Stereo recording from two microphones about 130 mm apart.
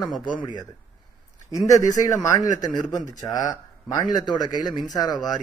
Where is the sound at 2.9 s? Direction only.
70° left (ahead or behind).